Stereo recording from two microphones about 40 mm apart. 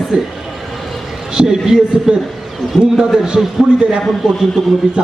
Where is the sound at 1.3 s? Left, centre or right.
Centre.